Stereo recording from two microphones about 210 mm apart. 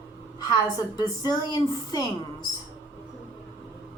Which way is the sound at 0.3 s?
15° left (ahead or behind).